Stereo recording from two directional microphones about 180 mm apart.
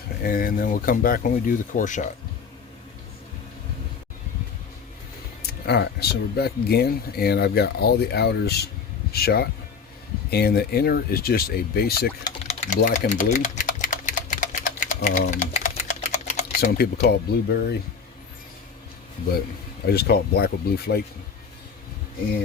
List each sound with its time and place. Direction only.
0.2 s speech: 55° left (ahead or behind)
5.4 s speech: 65° left (ahead or behind)
12.5 s typing: 40° left (ahead or behind)
16.6 s speech: 60° left (ahead or behind)
19.8 s speech: 60° left (ahead or behind)